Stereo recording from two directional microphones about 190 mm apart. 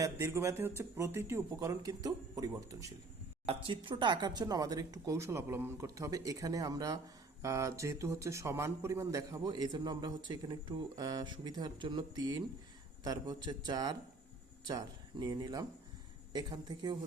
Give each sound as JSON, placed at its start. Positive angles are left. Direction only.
{"t": 0.0, "sound": "speech", "side_deg": -15}